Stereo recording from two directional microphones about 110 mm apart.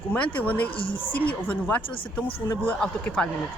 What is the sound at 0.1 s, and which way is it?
Speech, 10° left (ahead or behind).